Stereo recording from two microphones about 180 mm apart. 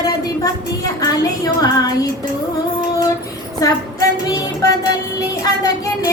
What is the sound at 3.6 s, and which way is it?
Female singing, 20° left (ahead or behind).